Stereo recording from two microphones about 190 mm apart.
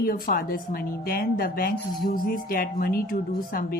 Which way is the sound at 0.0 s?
50° left (ahead or behind).